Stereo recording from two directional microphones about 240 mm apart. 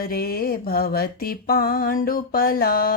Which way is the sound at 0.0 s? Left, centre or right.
Left.